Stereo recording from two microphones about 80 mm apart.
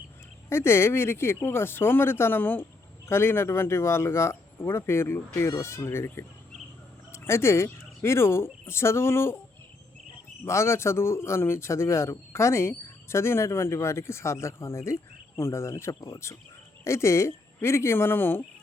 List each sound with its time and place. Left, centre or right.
0.5 s speech: left
10.4 s speech: left